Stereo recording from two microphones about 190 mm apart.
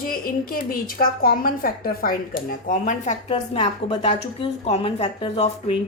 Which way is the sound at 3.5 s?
30° left (ahead or behind).